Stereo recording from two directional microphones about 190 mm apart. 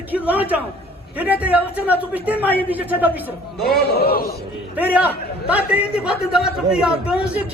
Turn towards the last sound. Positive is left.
turn(degrees=-5)  # may be behind; listen again after turning